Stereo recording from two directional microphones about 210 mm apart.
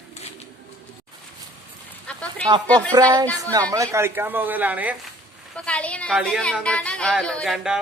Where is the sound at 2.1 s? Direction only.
5° left (ahead or behind).